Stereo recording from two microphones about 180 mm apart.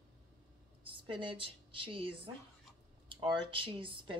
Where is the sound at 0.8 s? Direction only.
30° right (ahead or behind).